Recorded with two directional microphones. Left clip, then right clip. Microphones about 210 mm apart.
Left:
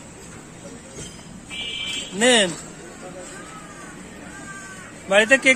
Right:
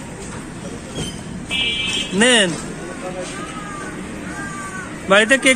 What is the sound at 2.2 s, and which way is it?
Speech, 5° left (ahead or behind).